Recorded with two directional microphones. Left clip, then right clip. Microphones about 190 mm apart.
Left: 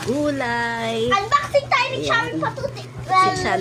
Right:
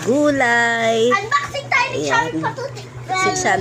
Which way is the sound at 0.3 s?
20° right (ahead or behind).